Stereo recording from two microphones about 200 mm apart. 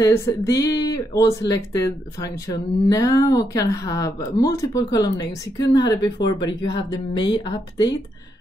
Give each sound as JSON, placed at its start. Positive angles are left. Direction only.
{"t": 0.0, "sound": "speech", "side_deg": 15}